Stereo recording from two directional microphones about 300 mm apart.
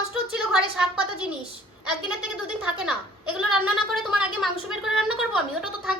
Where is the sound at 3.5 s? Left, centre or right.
Centre.